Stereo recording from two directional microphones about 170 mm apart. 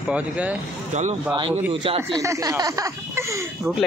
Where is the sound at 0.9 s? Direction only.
45° right (ahead or behind).